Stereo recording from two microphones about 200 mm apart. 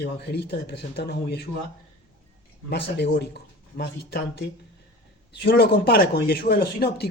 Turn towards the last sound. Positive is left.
turn(degrees=50)  # may be behind; listen again after turning